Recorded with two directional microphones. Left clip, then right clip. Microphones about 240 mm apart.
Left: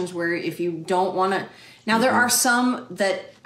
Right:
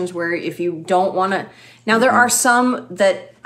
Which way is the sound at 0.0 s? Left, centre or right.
Centre.